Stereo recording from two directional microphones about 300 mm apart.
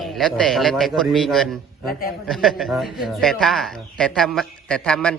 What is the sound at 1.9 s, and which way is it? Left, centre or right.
Speech, left.